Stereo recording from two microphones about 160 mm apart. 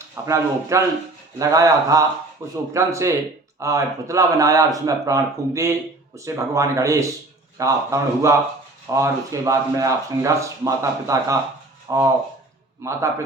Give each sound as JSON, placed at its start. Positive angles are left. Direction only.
{"t": 0.3, "sound": "a man's voice", "side_deg": -20}